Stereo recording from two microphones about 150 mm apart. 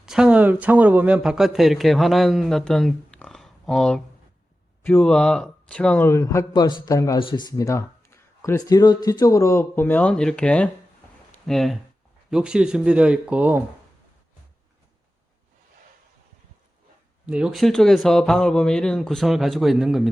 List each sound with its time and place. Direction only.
0.0 s a man's voice: 5° right (ahead or behind); by 7.2 s 20° left (ahead or behind)
7.2 s speech: 35° left (ahead or behind); by 13.7 s 10° right (ahead or behind)
17.2 s speech: 5° right (ahead or behind)